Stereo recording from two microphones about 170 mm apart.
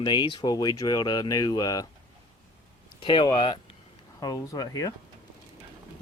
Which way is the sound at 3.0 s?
30° left (ahead or behind).